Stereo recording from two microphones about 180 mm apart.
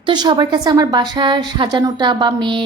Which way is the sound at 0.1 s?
25° right (ahead or behind).